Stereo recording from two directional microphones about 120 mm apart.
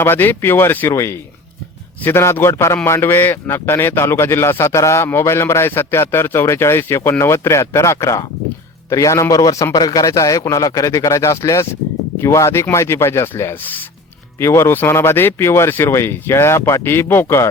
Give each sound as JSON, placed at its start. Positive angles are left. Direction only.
{"t": 0.0, "sound": "a man's voice", "side_deg": 15}